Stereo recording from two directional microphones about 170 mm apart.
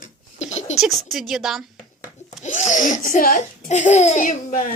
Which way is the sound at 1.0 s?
Centre (ahead or behind).